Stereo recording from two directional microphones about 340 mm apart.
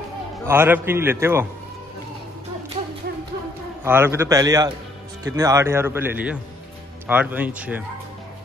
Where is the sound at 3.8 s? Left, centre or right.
Centre.